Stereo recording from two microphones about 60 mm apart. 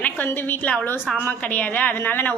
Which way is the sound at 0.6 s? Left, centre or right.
Centre.